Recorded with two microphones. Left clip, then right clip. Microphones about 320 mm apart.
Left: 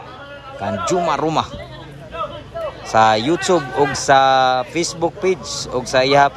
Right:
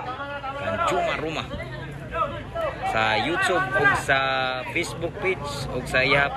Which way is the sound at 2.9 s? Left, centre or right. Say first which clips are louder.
Left 10 dB; centre.